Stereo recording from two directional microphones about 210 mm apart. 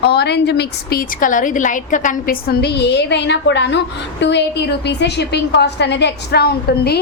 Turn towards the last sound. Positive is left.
turn(degrees=50)  # may be behind; listen again after turning